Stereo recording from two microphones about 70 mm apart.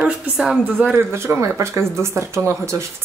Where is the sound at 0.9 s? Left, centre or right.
Right.